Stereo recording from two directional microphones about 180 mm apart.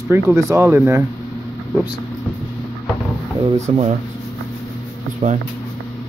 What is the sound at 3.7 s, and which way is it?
Speech, 35° right (ahead or behind).